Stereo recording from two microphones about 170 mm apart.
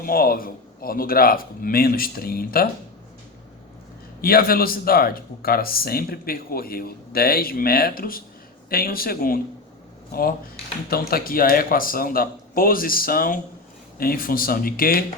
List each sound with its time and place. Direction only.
0.0 s speech: 60° left (ahead or behind)
4.2 s speech: 60° left (ahead or behind)